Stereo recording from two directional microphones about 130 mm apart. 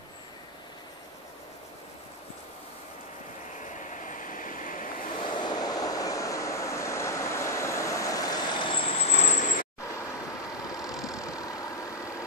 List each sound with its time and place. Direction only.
3.9 s vehicle: 85° left
5.3 s vehicle: 35° left (ahead or behind); by 9.7 s 80° left
10.6 s vehicle: 25° left (ahead or behind)